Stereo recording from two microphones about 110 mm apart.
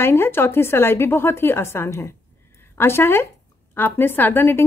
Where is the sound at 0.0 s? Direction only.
20° left (ahead or behind).